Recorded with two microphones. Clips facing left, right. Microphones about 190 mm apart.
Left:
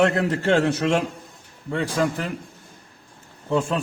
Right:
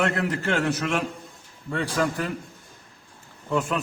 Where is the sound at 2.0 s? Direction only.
25° left (ahead or behind).